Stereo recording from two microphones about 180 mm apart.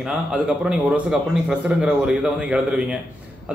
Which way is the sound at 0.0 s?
5° right (ahead or behind).